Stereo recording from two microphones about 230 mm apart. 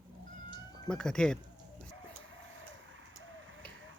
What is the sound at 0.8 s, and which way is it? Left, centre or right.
Speech, centre.